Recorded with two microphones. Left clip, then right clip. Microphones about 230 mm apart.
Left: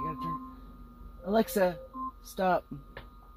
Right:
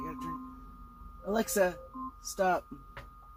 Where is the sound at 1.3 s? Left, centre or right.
Left.